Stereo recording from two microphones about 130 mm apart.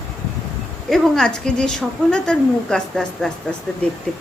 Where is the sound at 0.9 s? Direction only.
5° left (ahead or behind).